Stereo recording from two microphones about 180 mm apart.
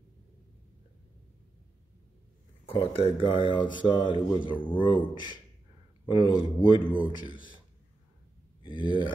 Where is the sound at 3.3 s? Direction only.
25° left (ahead or behind).